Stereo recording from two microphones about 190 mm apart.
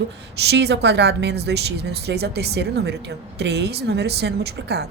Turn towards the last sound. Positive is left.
turn(degrees=-60)  # may be behind; listen again after turning